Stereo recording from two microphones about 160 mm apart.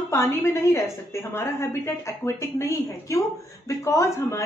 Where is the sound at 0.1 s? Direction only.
15° left (ahead or behind).